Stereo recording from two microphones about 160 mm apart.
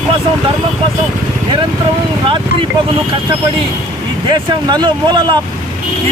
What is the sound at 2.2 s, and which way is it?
Speech, 30° right (ahead or behind).